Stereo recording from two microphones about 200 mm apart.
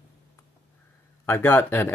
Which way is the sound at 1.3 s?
10° left (ahead or behind).